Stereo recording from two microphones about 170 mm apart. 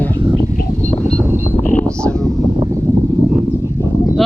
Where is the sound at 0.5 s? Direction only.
50° left (ahead or behind).